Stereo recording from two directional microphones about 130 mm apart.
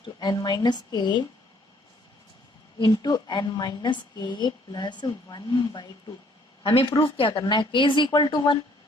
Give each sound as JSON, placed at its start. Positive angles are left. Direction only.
{"t": 0.0, "sound": "a woman's voice", "side_deg": 35}
{"t": 2.7, "sound": "a woman's voice", "side_deg": 35}